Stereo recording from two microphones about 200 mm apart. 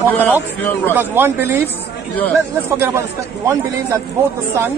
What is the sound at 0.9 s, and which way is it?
Speech, 10° right (ahead or behind).